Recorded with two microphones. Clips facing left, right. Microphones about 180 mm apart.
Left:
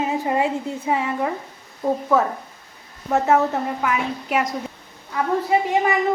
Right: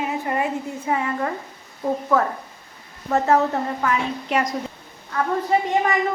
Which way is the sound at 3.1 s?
10° left (ahead or behind).